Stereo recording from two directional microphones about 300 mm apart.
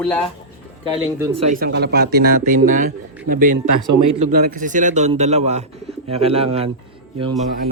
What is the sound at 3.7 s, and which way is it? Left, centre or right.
Speech, right.